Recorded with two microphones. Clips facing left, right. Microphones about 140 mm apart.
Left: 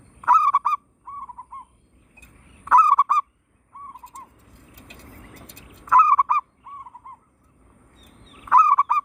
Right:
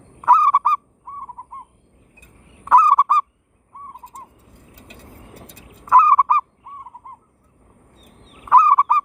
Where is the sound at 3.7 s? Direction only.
45° right (ahead or behind).